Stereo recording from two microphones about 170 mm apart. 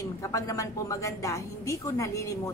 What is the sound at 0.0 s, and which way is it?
A woman's voice, 20° left (ahead or behind).